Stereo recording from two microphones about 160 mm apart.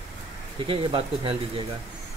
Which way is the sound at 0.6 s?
35° right (ahead or behind).